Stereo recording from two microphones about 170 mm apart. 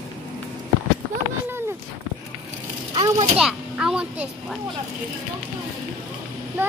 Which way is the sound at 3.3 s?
5° right (ahead or behind).